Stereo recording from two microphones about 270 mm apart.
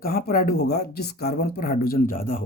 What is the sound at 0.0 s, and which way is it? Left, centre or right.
Speech, left.